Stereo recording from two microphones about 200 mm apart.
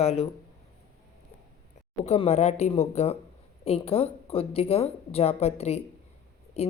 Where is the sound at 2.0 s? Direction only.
30° left (ahead or behind).